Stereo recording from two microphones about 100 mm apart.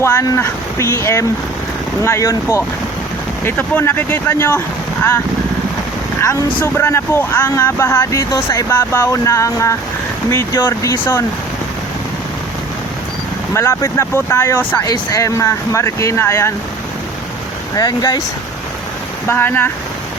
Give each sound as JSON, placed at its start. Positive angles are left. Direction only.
{"t": 0.0, "sound": "speech", "side_deg": 30}
{"t": 6.6, "sound": "speech", "side_deg": 25}
{"t": 13.5, "sound": "speech", "side_deg": 25}
{"t": 14.8, "sound": "speech", "side_deg": 35}
{"t": 17.7, "sound": "speech", "side_deg": 40}
{"t": 19.3, "sound": "speech", "side_deg": 20}